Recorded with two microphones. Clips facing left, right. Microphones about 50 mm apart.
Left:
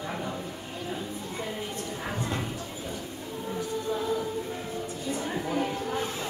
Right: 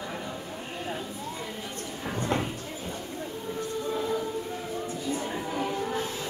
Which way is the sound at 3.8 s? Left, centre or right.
Centre.